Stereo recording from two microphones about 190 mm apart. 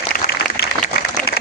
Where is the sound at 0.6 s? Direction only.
55° left (ahead or behind).